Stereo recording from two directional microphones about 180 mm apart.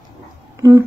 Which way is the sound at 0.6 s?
15° right (ahead or behind).